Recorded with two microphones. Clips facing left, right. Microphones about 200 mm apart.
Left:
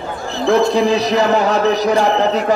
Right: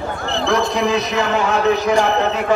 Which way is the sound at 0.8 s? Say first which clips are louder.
Left 4 dB; 35° left (ahead or behind).